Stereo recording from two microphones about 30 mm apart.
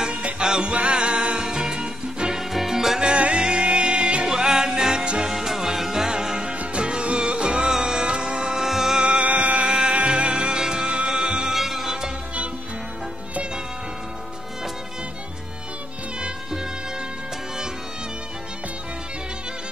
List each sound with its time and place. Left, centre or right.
0.4 s music: right
1.4 s music: right
2.7 s music: centre
3.3 s music: right
5.3 s music: centre
6.6 s music: right; by 9.0 s centre
9.0 s music: right
9.3 s music: right
9.7 s music: right
11.5 s music: centre